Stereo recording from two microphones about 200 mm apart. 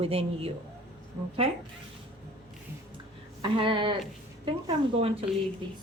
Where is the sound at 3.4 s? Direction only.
25° right (ahead or behind).